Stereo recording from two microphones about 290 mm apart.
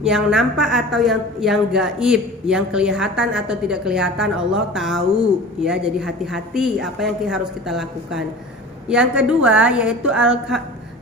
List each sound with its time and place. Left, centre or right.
0.0 s a woman's voice: centre